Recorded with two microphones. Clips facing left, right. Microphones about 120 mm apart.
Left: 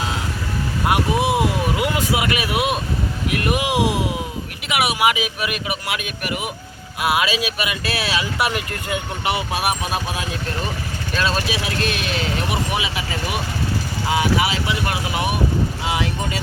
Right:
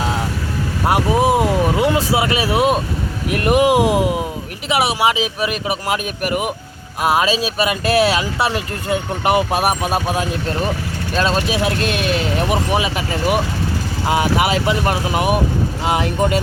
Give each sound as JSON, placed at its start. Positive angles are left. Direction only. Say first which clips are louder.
{"t": 0.9, "sound": "vehicle", "louder": "right 4 dB", "side_deg": -40}
{"t": 3.3, "sound": "speech", "louder": "right 7 dB", "side_deg": -40}
{"t": 4.7, "sound": "speech", "louder": "right 3 dB", "side_deg": -35}
{"t": 8.4, "sound": "speech", "louder": "right 3 dB", "side_deg": -30}
{"t": 11.1, "sound": "speech", "louder": "right 4 dB", "side_deg": -40}
{"t": 14.1, "sound": "speech", "louder": "right 3 dB", "side_deg": -50}